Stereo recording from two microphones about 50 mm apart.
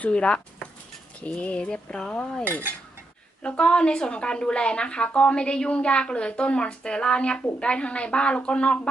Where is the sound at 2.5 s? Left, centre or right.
Right.